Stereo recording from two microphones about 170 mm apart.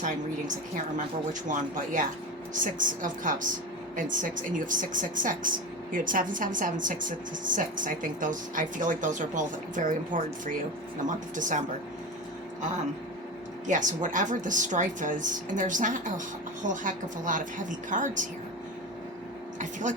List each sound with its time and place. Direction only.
0.9 s speech: 50° right (ahead or behind)
13.7 s speech: 50° right (ahead or behind)